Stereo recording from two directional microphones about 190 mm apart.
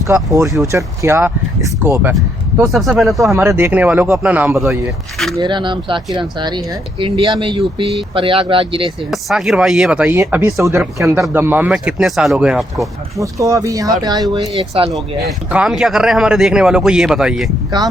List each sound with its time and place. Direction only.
0.7 s speech: 15° right (ahead or behind)
2.6 s speech: centre (ahead or behind)
3.3 s speech: 10° right (ahead or behind)
5.4 s speech: 25° right (ahead or behind)
9.0 s speech: centre (ahead or behind)
10.2 s speech: 15° right (ahead or behind)
13.1 s speech: 15° right (ahead or behind)
14.8 s speech: centre (ahead or behind)